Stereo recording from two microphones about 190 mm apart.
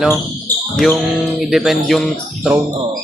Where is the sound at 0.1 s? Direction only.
5° left (ahead or behind).